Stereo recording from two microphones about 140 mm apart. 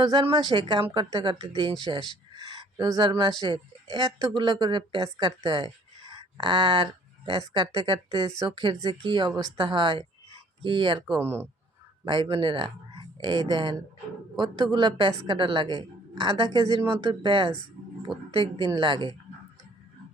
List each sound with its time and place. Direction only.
0.0 s speech: 35° right (ahead or behind)
1.8 s a sound: 35° right (ahead or behind)
2.7 s a woman's voice: 30° right (ahead or behind)
11.2 s speech: 15° right (ahead or behind)
12.0 s speech: 30° right (ahead or behind)